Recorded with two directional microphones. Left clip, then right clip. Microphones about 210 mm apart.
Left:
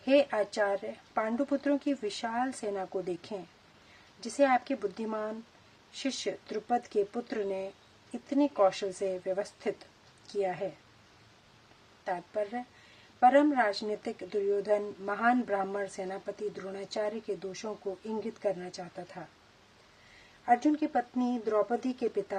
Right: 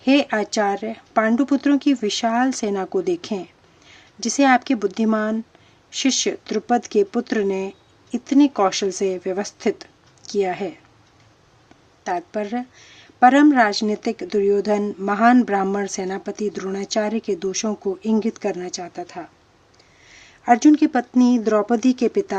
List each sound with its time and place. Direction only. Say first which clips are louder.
0.0 s speech: right 7 dB; 35° right (ahead or behind)
12.0 s speech: right 9 dB; 40° right (ahead or behind)
20.4 s speech: right 12 dB; 40° right (ahead or behind)